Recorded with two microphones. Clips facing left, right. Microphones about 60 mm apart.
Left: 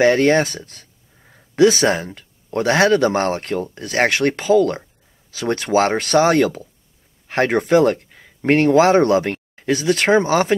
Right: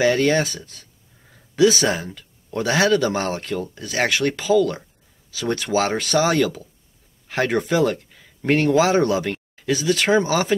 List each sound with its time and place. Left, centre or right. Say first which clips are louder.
0.0 s speech: left 4 dB; left